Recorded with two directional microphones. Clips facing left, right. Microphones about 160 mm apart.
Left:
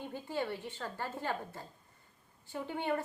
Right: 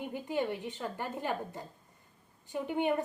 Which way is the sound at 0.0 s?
15° right (ahead or behind).